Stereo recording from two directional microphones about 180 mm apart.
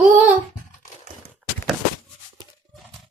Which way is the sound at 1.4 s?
5° right (ahead or behind).